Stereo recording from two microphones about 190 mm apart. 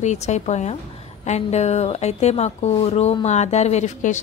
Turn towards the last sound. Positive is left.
turn(degrees=40)  # may be behind; listen again after turning